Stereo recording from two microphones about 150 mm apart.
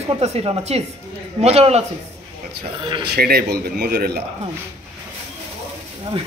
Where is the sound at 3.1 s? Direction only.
90° right.